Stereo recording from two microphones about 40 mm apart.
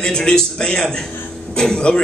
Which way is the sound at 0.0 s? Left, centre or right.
Centre.